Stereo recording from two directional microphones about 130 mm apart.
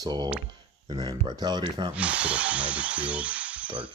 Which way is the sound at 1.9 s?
10° right (ahead or behind).